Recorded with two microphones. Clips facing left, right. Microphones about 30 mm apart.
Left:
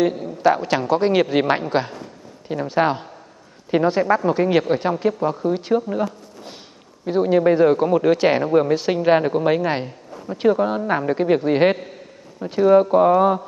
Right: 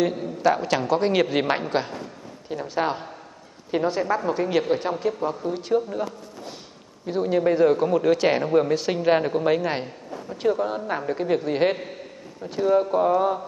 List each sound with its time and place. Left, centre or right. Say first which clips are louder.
0.0 s a man's voice: left 4 dB; centre
7.1 s a man's voice: left 5 dB; centre
12.4 s mantra: left 7 dB; centre